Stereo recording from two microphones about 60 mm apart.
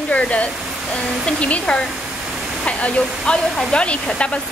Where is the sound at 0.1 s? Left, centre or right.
Left.